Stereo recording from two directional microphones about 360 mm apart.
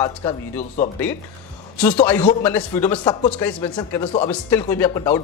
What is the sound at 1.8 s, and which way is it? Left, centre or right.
A man's voice, centre.